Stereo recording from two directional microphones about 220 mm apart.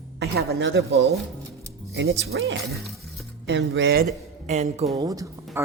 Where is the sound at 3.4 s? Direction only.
55° right (ahead or behind).